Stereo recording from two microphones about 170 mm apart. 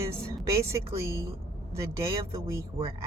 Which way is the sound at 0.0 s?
20° right (ahead or behind).